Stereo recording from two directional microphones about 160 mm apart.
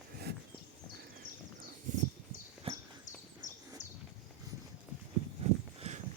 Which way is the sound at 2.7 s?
35° right (ahead or behind).